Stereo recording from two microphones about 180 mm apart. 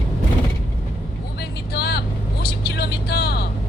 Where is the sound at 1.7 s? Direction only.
65° left (ahead or behind).